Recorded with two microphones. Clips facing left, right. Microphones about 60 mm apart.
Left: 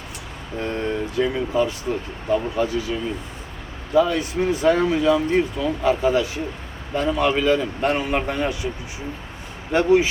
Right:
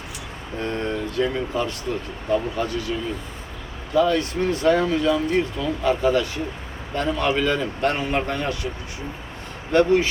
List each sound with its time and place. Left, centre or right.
0.6 s a man's voice: centre
3.9 s a man's voice: centre
9.7 s a man's voice: centre